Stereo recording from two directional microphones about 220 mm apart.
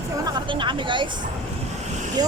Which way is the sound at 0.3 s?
20° right (ahead or behind).